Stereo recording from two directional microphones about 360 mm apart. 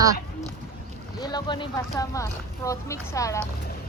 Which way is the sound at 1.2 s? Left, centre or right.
Centre.